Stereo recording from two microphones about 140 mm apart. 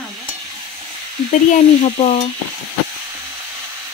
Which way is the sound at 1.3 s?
65° left (ahead or behind).